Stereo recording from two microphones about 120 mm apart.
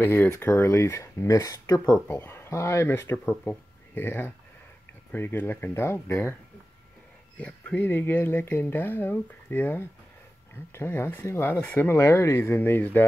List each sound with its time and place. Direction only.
0.0 s speech: 20° left (ahead or behind)
2.0 s speech: 20° left (ahead or behind)
7.3 s speech: 10° left (ahead or behind)